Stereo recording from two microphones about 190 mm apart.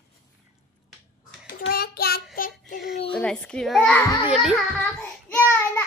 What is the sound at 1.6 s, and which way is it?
Child singing, 55° left (ahead or behind).